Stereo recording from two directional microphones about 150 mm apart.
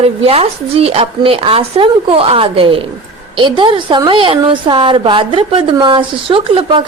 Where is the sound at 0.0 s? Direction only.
40° right (ahead or behind).